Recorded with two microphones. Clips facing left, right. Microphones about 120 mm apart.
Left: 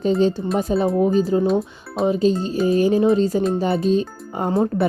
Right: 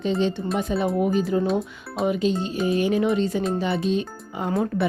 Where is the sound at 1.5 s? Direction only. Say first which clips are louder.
Left 4 dB; centre (ahead or behind).